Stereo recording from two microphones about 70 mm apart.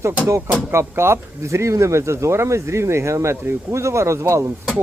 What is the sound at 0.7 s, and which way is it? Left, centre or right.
A man's voice, right.